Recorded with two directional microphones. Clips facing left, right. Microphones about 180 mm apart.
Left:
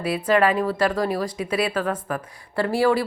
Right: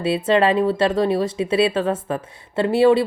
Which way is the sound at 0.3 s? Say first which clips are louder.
Right 2 dB; 25° right (ahead or behind).